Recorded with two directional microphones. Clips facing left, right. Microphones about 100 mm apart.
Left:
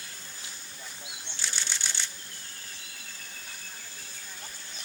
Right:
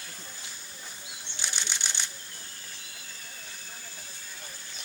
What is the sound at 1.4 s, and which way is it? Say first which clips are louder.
Camera: right 1 dB; 15° right (ahead or behind).